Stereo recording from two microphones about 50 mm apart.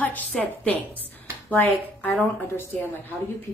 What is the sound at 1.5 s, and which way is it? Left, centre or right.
A woman's voice, left.